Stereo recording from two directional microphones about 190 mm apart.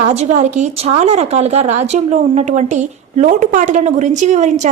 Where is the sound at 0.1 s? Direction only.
35° right (ahead or behind).